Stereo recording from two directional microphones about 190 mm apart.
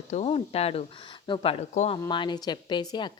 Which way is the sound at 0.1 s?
35° left (ahead or behind).